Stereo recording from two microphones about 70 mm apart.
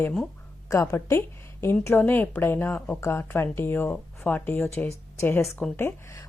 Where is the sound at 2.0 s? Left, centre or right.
Left.